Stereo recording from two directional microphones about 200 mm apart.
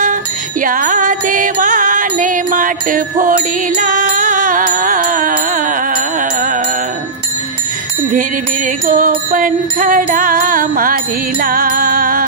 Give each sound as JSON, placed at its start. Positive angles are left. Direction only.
{"t": 0.0, "sound": "music", "side_deg": -40}
{"t": 8.1, "sound": "music", "side_deg": -40}